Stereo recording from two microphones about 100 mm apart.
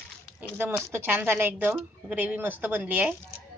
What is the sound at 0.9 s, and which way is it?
A woman's voice, 20° right (ahead or behind).